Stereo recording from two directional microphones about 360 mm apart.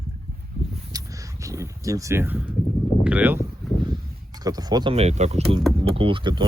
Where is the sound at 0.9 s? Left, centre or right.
Centre.